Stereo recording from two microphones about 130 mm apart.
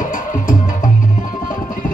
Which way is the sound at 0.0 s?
85° left.